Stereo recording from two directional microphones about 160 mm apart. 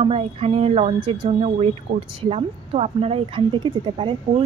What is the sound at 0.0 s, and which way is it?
Speech, 35° right (ahead or behind).